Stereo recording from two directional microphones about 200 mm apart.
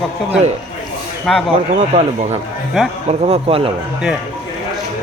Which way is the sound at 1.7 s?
35° right (ahead or behind).